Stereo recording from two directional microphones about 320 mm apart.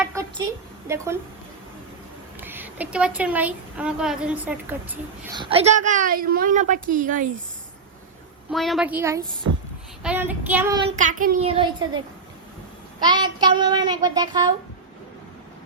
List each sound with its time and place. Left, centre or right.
0.0 s a sound: centre
2.4 s a woman's voice: centre; by 7.3 s right
8.4 s a woman's voice: centre
10.8 s child singing: right
13.0 s a woman's voice: centre